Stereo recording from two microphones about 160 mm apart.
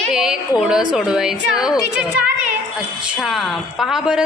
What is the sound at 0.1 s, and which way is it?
A woman's voice, 5° right (ahead or behind).